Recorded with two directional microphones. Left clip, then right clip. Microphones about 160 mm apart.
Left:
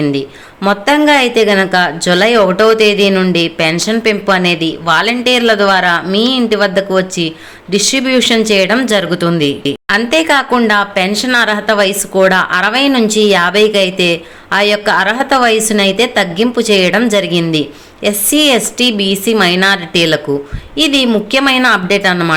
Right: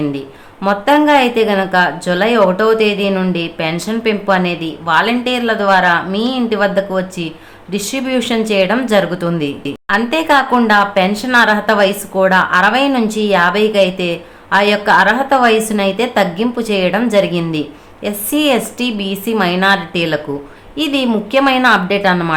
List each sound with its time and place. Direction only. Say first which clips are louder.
0.0 s speech: left 5 dB; 15° left (ahead or behind)